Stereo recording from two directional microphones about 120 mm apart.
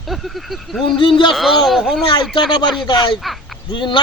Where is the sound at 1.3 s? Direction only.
Centre (ahead or behind).